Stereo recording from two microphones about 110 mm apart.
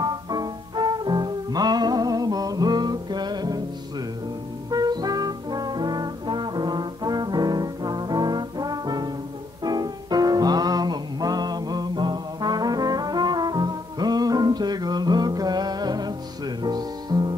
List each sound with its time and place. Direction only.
0.0 s music: 40° right (ahead or behind)
4.6 s brass instrument: 35° right (ahead or behind)
9.6 s music: 35° right (ahead or behind)